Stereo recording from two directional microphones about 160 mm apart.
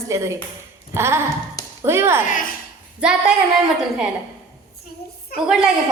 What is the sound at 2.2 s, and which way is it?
Speech, 60° left (ahead or behind).